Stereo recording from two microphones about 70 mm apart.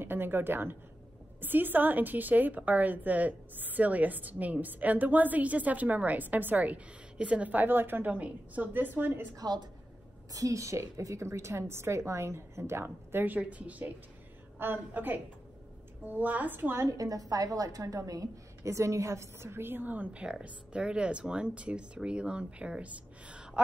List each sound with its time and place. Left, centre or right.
0.0 s a woman's voice: right
9.4 s a woman's voice: right
10.3 s a woman's voice: right
16.9 s a woman's voice: right; by 23.6 s centre